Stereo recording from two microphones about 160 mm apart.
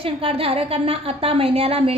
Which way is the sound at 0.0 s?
35° right (ahead or behind).